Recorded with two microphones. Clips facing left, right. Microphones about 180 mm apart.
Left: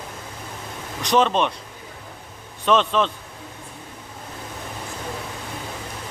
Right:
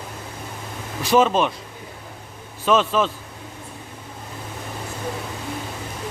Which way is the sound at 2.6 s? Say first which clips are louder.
Even; 5° right (ahead or behind).